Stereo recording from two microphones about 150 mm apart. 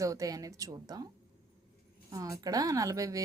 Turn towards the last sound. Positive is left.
turn(degrees=-20)  # may be behind; listen again after turning